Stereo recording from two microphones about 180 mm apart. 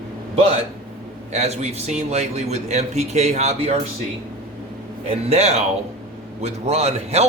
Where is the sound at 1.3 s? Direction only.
40° right (ahead or behind).